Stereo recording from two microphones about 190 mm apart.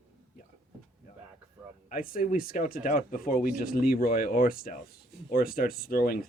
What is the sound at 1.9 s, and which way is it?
Speech, 50° left (ahead or behind).